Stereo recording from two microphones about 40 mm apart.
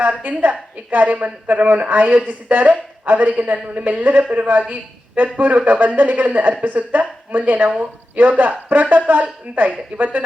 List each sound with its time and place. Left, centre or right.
0.0 s a woman's voice: right
5.7 s a woman's voice: right
6.0 s a woman's voice: right